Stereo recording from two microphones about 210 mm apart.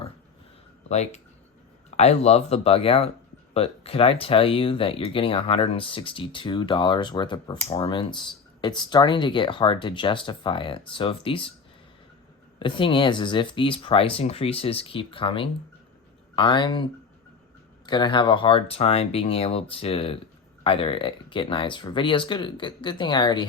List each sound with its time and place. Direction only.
0.9 s speech: 30° left (ahead or behind)
12.5 s speech: 25° left (ahead or behind)